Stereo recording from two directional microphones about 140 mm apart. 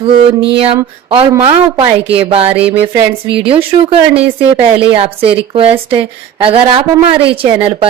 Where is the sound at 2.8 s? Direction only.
40° right (ahead or behind).